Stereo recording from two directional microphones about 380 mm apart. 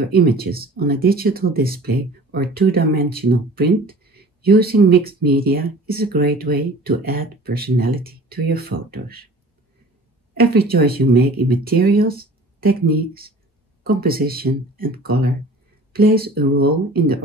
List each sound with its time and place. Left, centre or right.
0.0 s speech: right
10.3 s speech: right